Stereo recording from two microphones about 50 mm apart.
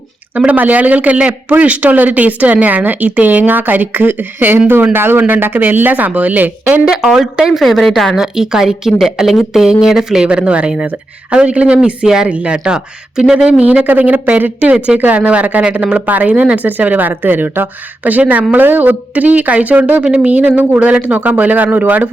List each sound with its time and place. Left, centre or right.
0.3 s speech: right
6.8 s a woman's voice: centre
8.1 s a woman's voice: centre
10.2 s speech: right
13.4 s speech: right
20.1 s speech: right